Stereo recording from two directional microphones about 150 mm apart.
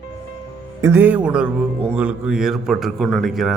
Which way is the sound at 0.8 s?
15° right (ahead or behind).